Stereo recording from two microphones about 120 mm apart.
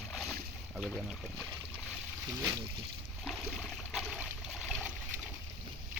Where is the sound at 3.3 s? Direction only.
Centre (ahead or behind).